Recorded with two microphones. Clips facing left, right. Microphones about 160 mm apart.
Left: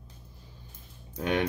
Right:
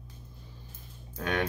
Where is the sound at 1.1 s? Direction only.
15° left (ahead or behind).